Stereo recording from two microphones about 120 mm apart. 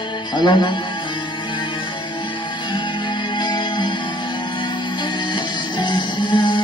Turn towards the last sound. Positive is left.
turn(degrees=40)  # may be behind; listen again after turning